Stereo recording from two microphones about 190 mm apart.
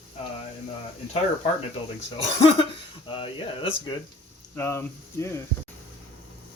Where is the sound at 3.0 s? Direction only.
30° left (ahead or behind).